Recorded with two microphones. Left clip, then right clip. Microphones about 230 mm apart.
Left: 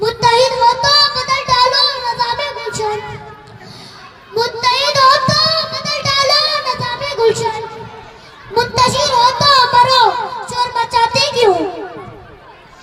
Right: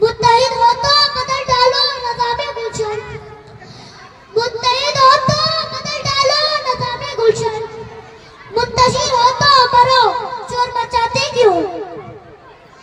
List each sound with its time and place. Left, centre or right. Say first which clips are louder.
0.0 s child singing: even; left
4.4 s child singing: left 1 dB; left
8.5 s a sound: even; left